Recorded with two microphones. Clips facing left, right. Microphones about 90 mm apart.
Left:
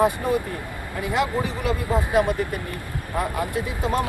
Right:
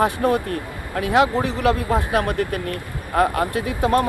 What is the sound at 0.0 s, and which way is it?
Speech, 70° right (ahead or behind).